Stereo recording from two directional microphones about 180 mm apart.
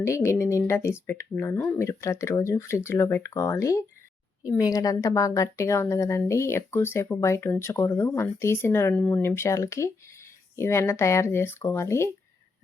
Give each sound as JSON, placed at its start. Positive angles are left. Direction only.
{"t": 0.0, "sound": "speech", "side_deg": 15}